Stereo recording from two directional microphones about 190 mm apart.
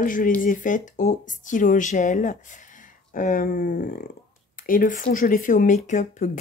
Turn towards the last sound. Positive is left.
turn(degrees=40)  # may be behind; listen again after turning